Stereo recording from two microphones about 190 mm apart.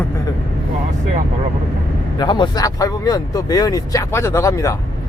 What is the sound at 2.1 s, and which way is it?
Speech, 25° left (ahead or behind).